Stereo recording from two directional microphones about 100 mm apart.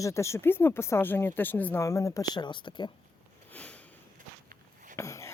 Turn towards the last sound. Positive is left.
turn(degrees=30)  # may be behind; listen again after turning